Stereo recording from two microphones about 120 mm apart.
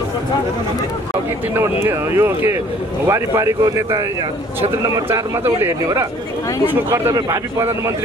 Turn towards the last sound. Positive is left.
turn(degrees=-25)  # may be behind; listen again after turning